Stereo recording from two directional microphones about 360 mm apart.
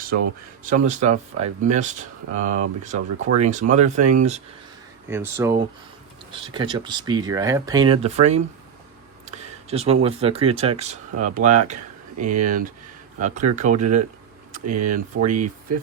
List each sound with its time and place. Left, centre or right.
0.6 s speech: right
1.1 s speech: right
1.7 s speech: right
5.0 s speech: centre